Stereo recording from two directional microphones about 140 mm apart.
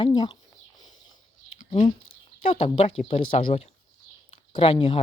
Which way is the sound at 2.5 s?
45° left (ahead or behind).